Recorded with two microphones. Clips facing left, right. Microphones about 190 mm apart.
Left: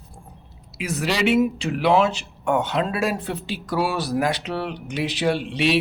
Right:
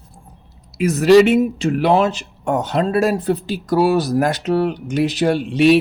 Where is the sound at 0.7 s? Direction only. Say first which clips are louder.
Right 15 dB; 45° right (ahead or behind).